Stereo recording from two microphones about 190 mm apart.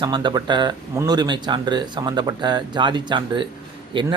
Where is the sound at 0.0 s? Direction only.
25° right (ahead or behind).